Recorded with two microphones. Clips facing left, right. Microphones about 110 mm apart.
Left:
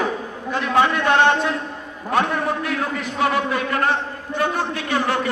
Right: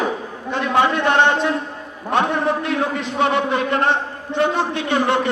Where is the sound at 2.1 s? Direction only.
20° right (ahead or behind).